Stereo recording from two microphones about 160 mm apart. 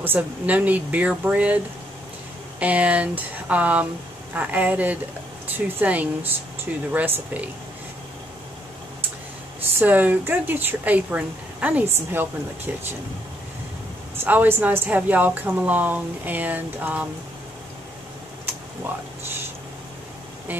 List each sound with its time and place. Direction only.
0.0 s speech: 10° right (ahead or behind)
2.6 s speech: 10° right (ahead or behind)
9.6 s speech: 10° right (ahead or behind)
14.1 s speech: 10° right (ahead or behind)